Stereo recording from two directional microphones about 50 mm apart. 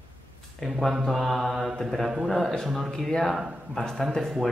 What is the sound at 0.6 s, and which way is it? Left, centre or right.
Speech, centre.